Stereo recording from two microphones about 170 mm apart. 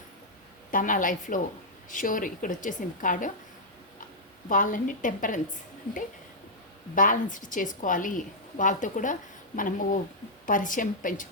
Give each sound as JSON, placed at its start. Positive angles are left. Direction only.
{"t": 0.7, "sound": "a woman's voice", "side_deg": 50}
{"t": 4.4, "sound": "a woman's voice", "side_deg": 50}
{"t": 6.9, "sound": "a woman's voice", "side_deg": 50}